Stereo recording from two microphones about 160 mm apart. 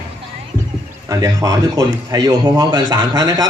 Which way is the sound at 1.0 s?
20° right (ahead or behind).